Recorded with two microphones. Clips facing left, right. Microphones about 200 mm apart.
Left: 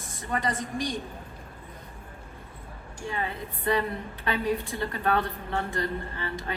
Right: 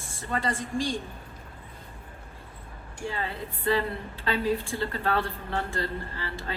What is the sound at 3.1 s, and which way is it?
Speech, 20° left (ahead or behind).